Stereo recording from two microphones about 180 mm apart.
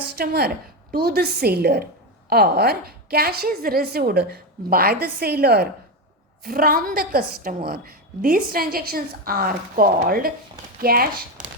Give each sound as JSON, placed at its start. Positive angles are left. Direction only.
{"t": 0.2, "sound": "a woman's voice", "side_deg": -60}